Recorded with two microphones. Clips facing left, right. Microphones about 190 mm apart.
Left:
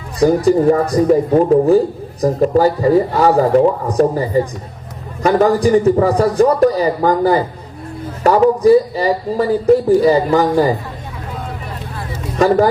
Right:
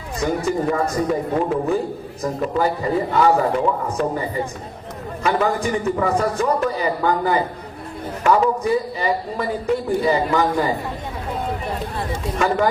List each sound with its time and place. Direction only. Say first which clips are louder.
0.2 s speech: left 9 dB; 35° left (ahead or behind)
12.4 s speech: left 8 dB; 35° left (ahead or behind)